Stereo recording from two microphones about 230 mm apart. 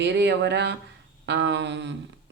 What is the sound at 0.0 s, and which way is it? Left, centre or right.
Speech, right.